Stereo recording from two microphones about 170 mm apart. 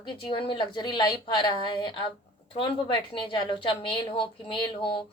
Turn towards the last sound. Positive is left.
turn(degrees=30)  # may be behind; listen again after turning